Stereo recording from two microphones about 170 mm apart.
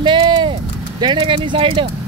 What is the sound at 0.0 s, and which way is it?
Vehicle, 30° right (ahead or behind).